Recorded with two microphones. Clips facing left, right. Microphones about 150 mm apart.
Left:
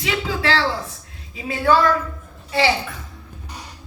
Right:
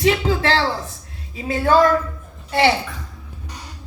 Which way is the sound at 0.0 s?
40° right (ahead or behind).